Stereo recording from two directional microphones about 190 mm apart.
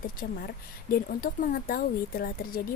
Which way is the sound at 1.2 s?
45° left (ahead or behind).